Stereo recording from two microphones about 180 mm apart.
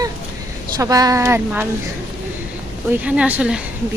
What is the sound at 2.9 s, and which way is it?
Speech, 10° right (ahead or behind).